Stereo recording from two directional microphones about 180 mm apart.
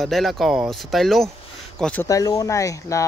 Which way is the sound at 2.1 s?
20° left (ahead or behind).